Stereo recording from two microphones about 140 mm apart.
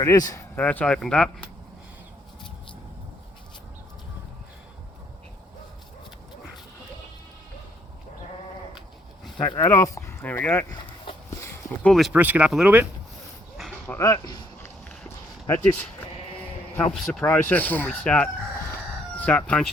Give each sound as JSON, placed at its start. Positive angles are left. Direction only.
{"t": 0.0, "sound": "speech", "side_deg": 25}
{"t": 0.6, "sound": "speech", "side_deg": 10}
{"t": 9.6, "sound": "speech", "side_deg": 20}
{"t": 11.3, "sound": "a sound", "side_deg": 20}
{"t": 11.9, "sound": "speech", "side_deg": 0}
{"t": 12.1, "sound": "speech", "side_deg": -10}
{"t": 14.0, "sound": "speech", "side_deg": 30}
{"t": 15.6, "sound": "sheep", "side_deg": 10}
{"t": 17.5, "sound": "speech", "side_deg": 10}